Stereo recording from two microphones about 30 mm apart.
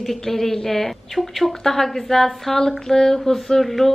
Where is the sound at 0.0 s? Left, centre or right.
Centre.